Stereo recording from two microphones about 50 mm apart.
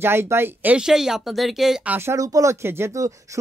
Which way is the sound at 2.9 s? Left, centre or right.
Right.